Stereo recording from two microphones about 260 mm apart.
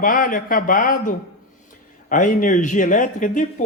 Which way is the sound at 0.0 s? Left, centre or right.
Left.